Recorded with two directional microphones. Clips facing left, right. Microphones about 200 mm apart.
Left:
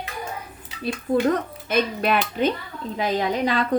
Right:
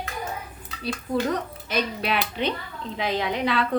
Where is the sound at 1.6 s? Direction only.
50° left (ahead or behind).